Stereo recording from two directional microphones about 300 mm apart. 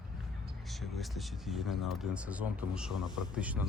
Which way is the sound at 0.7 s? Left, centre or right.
Centre.